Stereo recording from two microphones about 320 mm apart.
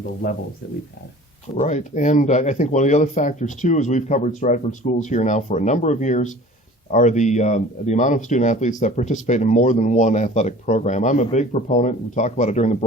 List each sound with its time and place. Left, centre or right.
1.6 s speech: left